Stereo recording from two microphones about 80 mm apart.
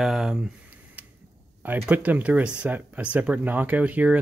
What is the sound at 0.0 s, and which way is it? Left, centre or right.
Speech, centre.